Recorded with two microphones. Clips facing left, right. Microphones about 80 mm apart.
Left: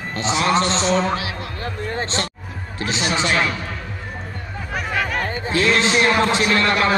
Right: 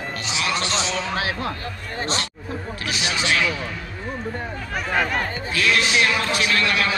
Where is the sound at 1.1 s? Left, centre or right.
Right.